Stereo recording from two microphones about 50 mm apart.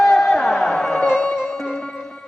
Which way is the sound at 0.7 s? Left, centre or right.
Centre.